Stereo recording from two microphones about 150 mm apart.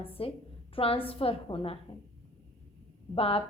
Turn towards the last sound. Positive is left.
turn(degrees=40)  # may be behind; listen again after turning